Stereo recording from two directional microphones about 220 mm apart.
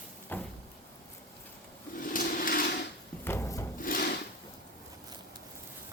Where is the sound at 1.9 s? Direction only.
40° left (ahead or behind).